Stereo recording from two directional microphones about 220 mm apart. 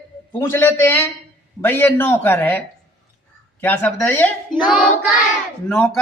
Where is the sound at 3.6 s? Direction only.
10° left (ahead or behind).